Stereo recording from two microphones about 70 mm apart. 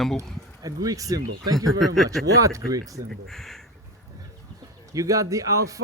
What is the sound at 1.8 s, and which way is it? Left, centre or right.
Speech, centre.